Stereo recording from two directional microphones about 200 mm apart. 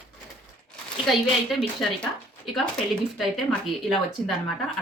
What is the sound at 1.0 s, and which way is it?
Speech, centre (ahead or behind).